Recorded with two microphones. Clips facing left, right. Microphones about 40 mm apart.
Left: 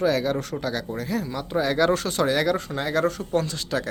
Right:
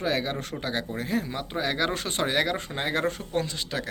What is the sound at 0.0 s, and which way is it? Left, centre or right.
Speech, right.